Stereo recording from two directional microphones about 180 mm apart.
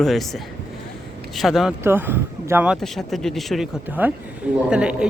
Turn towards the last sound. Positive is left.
turn(degrees=-5)  # may be behind; listen again after turning